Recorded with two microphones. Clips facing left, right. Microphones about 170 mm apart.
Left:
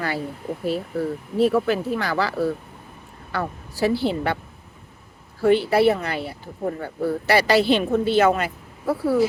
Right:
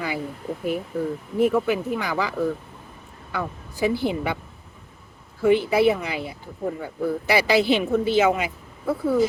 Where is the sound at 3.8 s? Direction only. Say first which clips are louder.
Left 2 dB; 15° right (ahead or behind).